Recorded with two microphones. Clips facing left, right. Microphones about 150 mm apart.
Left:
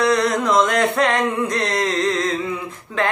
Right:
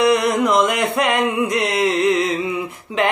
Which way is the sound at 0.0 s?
10° right (ahead or behind).